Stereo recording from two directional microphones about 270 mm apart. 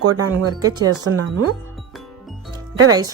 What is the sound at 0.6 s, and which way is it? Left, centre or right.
Speech, centre.